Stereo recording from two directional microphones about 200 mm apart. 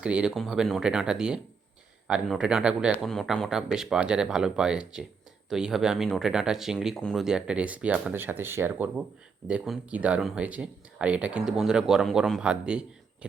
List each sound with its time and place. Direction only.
0.0 s speech: 5° right (ahead or behind)